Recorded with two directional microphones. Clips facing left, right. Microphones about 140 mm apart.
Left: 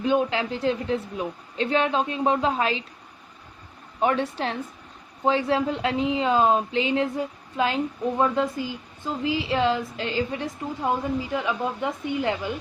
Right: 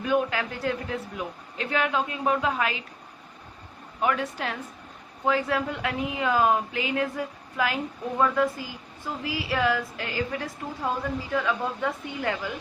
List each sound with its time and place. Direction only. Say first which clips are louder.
0.0 s speech: left 2 dB; 25° left (ahead or behind)
4.0 s speech: left 3 dB; 30° left (ahead or behind)